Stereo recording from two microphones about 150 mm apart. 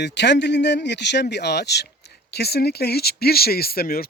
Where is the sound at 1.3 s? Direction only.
90° left.